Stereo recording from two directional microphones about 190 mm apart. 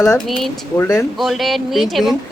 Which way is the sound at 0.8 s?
15° left (ahead or behind).